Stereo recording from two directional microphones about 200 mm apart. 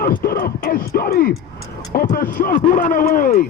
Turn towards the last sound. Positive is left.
turn(degrees=45)  # may be behind; listen again after turning